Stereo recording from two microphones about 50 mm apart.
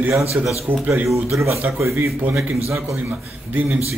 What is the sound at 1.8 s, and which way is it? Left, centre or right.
Speech, right.